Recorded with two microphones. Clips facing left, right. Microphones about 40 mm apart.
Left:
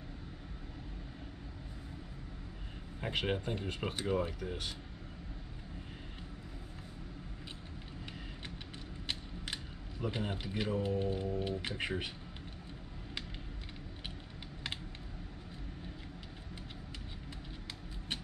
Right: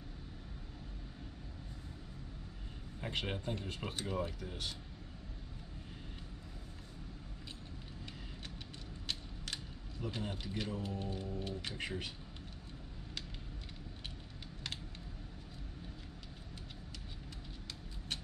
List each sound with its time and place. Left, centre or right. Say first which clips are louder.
3.1 s speech: left 4 dB; centre
9.0 s speech: left 2 dB; left